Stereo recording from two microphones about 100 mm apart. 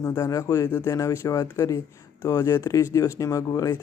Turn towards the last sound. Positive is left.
turn(degrees=35)  # may be behind; listen again after turning